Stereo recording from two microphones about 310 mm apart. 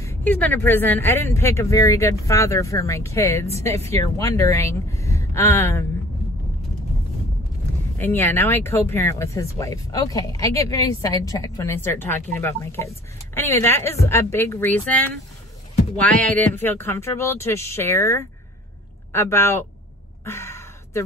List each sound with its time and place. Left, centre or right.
0.0 s speech: centre
8.0 s speech: centre
20.2 s a sound: centre